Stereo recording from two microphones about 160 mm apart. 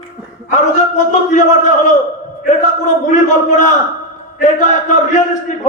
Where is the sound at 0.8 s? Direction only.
50° left (ahead or behind).